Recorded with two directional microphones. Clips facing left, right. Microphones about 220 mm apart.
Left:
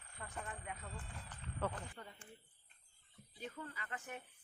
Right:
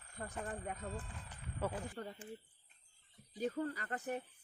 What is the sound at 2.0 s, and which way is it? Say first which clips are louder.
Speech: right 9 dB; 50° right (ahead or behind).